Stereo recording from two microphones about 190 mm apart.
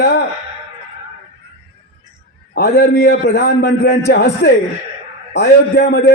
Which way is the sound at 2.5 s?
60° left (ahead or behind).